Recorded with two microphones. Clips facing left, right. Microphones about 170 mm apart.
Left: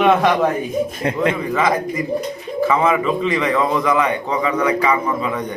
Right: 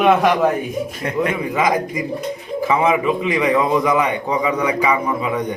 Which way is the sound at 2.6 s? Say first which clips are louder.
Left 1 dB; 15° right (ahead or behind).